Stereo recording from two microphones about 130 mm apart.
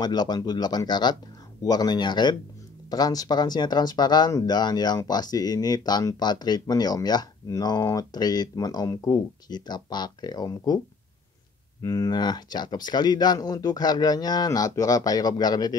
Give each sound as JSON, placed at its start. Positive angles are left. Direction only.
{"t": 0.0, "sound": "speech", "side_deg": 30}
{"t": 11.8, "sound": "speech", "side_deg": 30}